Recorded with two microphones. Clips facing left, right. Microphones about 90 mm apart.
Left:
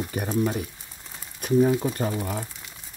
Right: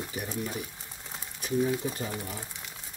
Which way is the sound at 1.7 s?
55° left (ahead or behind).